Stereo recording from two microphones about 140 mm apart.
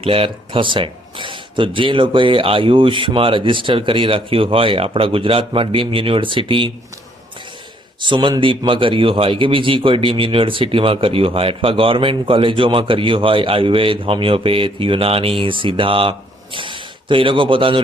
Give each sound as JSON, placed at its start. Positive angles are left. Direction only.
{"t": 0.0, "sound": "a man's voice", "side_deg": -40}
{"t": 8.0, "sound": "a man's voice", "side_deg": -35}